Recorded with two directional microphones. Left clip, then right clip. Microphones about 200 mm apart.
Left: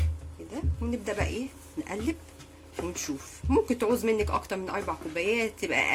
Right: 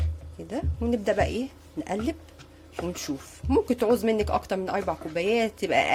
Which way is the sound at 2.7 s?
35° right (ahead or behind).